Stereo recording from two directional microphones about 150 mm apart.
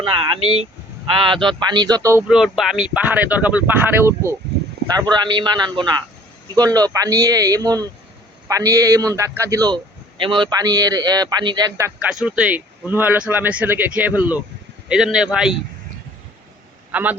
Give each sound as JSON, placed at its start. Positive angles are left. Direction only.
{"t": 0.0, "sound": "a man's voice", "side_deg": -40}
{"t": 2.2, "sound": "speech", "side_deg": -5}
{"t": 4.9, "sound": "a man's voice", "side_deg": -30}
{"t": 12.2, "sound": "a man's voice", "side_deg": -10}
{"t": 16.9, "sound": "speech", "side_deg": -10}